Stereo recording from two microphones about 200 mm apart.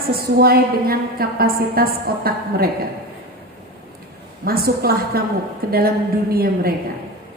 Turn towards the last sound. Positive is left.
turn(degrees=-50)  # may be behind; listen again after turning